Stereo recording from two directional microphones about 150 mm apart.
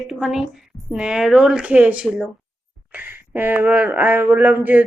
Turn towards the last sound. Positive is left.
turn(degrees=-10)  # may be behind; listen again after turning